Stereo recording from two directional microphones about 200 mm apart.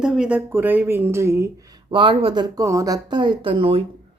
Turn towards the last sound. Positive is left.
turn(degrees=-25)  # may be behind; listen again after turning